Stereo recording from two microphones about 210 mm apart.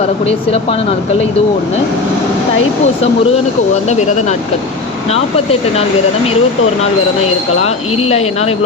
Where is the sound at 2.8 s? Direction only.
30° left (ahead or behind).